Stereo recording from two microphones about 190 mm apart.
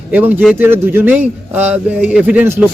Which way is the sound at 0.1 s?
10° right (ahead or behind).